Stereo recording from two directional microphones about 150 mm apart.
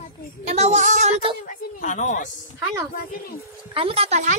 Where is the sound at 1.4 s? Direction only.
55° left (ahead or behind).